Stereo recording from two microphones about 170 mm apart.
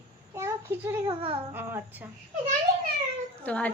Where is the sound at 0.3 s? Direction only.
15° right (ahead or behind).